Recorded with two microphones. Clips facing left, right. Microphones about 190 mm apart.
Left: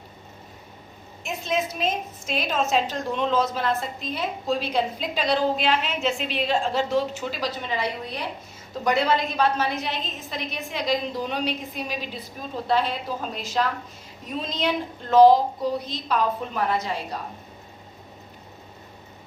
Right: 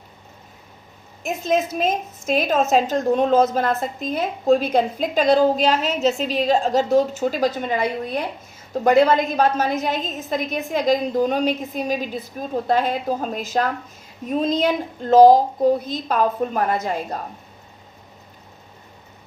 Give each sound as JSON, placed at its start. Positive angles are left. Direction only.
{"t": 1.2, "sound": "a woman's voice", "side_deg": -45}